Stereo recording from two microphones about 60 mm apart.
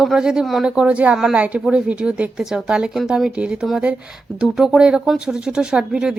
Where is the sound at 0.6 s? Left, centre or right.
Centre.